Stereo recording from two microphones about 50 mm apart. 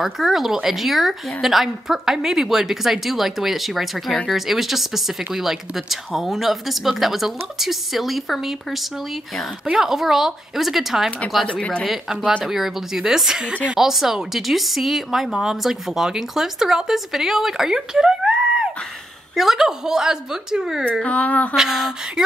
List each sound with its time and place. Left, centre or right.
0.0 s speech: centre
9.7 s speech: centre
11.4 s speech: left
12.4 s speech: centre
19.3 s speech: centre
21.0 s speech: left
21.5 s speech: centre